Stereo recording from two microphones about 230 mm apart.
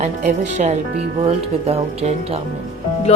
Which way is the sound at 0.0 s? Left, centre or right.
Right.